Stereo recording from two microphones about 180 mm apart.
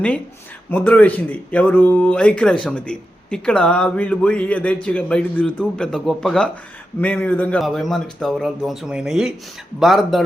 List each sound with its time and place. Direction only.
0.7 s speech: 10° left (ahead or behind)